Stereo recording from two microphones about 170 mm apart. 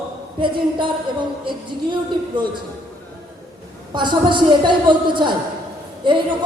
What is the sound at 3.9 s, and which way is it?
A woman's voice, 25° right (ahead or behind).